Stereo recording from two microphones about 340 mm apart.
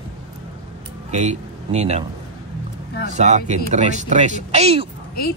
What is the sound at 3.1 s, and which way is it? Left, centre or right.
Speech, centre.